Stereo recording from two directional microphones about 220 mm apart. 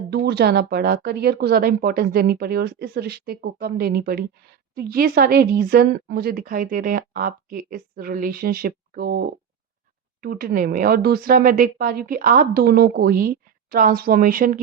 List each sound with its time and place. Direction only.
0.1 s a woman's voice: 50° right (ahead or behind)